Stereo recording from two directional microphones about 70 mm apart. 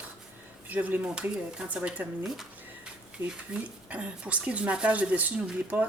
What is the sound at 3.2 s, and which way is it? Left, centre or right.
A woman's voice, centre.